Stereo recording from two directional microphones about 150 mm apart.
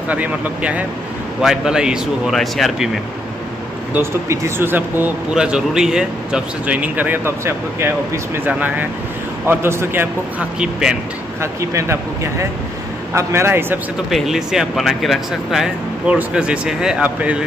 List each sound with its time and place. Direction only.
0.1 s speech: 10° right (ahead or behind)
3.9 s speech: 15° right (ahead or behind)
10.6 s speech: 5° right (ahead or behind)
11.7 s speech: 20° right (ahead or behind)
14.1 s speech: 5° right (ahead or behind)